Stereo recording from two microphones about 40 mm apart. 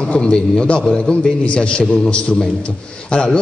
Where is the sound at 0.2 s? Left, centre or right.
Centre.